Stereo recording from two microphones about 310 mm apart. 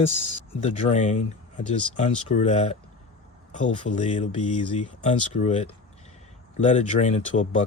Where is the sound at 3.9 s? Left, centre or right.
Left.